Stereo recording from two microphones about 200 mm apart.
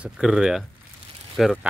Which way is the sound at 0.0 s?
5° right (ahead or behind).